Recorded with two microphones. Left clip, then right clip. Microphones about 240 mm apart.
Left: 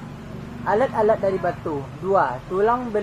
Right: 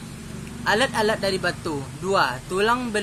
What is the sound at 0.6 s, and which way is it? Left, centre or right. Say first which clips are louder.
Speech: left 2 dB; right.